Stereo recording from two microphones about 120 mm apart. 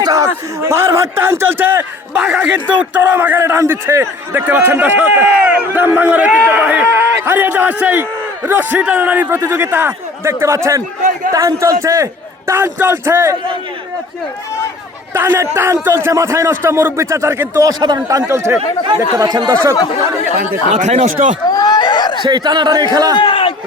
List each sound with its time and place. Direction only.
0.0 s a sound: 30° right (ahead or behind)
0.6 s a man's voice: 20° right (ahead or behind)
15.1 s a man's voice: 20° right (ahead or behind)
17.7 s speech: 35° right (ahead or behind)
18.2 s a man's voice: 25° right (ahead or behind)
19.1 s speech: 35° right (ahead or behind)
20.7 s speech: 85° right
21.5 s speech: 35° left (ahead or behind)
22.2 s speech: 40° right (ahead or behind)
23.1 s a man's voice: 45° left (ahead or behind)